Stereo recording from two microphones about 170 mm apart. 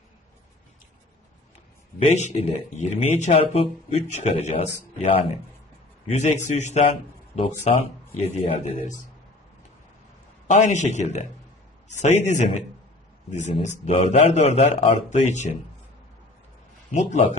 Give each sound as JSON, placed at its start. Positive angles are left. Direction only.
{"t": 2.0, "sound": "speech", "side_deg": 45}
{"t": 6.1, "sound": "a man's voice", "side_deg": 45}
{"t": 10.5, "sound": "a man's voice", "side_deg": 45}
{"t": 16.9, "sound": "a man's voice", "side_deg": 45}